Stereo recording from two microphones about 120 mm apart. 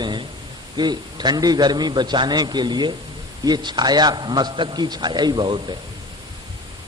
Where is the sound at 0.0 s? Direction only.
40° right (ahead or behind).